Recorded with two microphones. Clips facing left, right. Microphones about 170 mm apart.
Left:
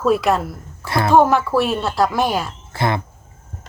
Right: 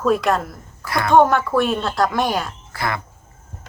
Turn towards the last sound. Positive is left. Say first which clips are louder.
# left 4 dB
turn(degrees=25)  # may be behind; listen again after turning